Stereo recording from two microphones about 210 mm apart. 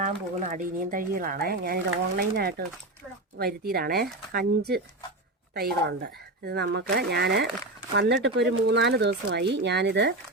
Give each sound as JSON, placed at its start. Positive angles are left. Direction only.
{"t": 0.0, "sound": "speech", "side_deg": -35}